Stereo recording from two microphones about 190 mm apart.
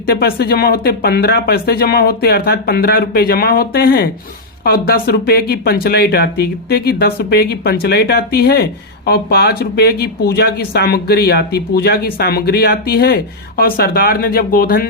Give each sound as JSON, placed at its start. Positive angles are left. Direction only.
{"t": 0.0, "sound": "speech", "side_deg": 55}